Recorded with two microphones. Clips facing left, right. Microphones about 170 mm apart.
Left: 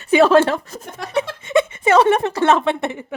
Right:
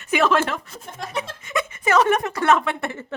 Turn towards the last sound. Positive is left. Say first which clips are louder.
# left 6 dB
turn(degrees=15)  # may be behind; listen again after turning